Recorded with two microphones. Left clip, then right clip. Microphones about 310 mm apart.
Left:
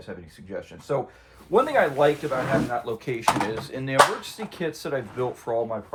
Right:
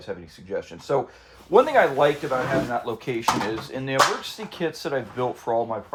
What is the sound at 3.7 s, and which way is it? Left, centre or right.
Speech, centre.